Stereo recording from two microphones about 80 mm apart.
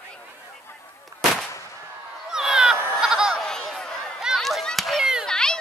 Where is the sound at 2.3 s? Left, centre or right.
Centre.